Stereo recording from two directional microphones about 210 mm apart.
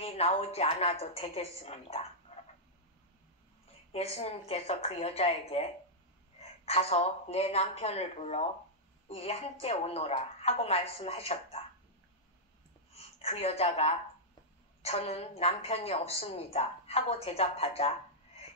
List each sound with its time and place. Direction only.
0.0 s a woman's voice: 30° left (ahead or behind)
2.3 s frog: 30° left (ahead or behind)
3.9 s a woman's voice: 30° left (ahead or behind)
12.9 s a woman's voice: 30° left (ahead or behind)